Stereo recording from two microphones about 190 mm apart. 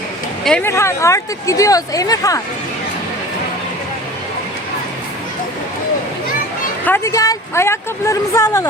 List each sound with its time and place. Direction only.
0.4 s speech: 10° left (ahead or behind)
6.8 s speech: 15° left (ahead or behind)